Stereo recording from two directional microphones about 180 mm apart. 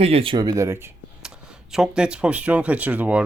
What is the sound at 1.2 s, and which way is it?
Speech, 5° right (ahead or behind).